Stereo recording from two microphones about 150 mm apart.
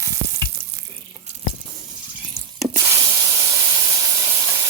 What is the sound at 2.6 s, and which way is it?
Spray, 35° right (ahead or behind).